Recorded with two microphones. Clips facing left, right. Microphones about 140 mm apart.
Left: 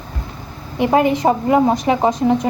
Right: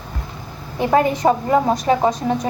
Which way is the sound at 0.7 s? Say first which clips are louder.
Left 2 dB; 15° left (ahead or behind).